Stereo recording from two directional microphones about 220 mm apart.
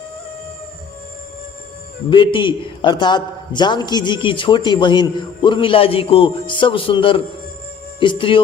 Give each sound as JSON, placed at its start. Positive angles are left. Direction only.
{"t": 2.0, "sound": "a man's voice", "side_deg": 20}